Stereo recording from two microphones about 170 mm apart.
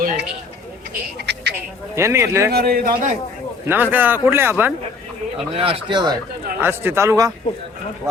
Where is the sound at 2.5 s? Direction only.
65° right (ahead or behind).